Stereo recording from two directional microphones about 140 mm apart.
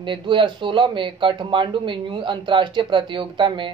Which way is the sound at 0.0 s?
35° right (ahead or behind).